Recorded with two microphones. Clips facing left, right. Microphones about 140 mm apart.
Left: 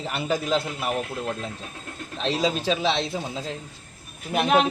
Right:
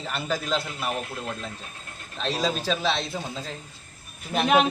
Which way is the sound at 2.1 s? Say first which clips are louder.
Left 2 dB; 20° left (ahead or behind).